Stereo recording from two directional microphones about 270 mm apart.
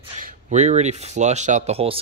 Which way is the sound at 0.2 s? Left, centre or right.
Right.